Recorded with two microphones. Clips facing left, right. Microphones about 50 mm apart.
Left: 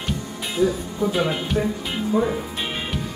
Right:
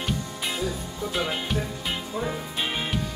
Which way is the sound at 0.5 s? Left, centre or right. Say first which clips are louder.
Left 14 dB; centre.